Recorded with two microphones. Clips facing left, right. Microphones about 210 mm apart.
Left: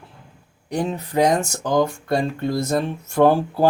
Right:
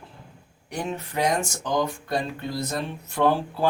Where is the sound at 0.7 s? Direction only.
35° left (ahead or behind).